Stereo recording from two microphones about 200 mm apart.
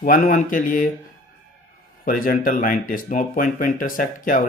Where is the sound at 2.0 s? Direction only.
45° left (ahead or behind).